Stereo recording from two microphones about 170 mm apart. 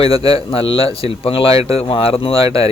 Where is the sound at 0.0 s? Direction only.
35° left (ahead or behind).